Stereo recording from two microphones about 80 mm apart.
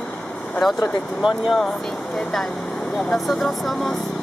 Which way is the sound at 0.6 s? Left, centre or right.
Centre.